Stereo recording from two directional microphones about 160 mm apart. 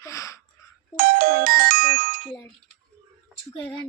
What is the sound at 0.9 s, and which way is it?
Music, 65° right (ahead or behind).